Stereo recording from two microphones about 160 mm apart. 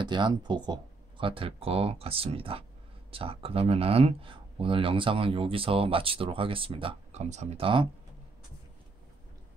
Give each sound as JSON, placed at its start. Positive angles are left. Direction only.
{"t": 0.0, "sound": "speech", "side_deg": -30}